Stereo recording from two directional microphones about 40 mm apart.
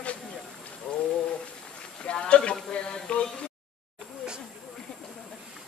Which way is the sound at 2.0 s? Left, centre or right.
Left.